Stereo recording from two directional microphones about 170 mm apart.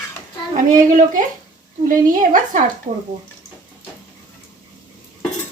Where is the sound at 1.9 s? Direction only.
50° right (ahead or behind).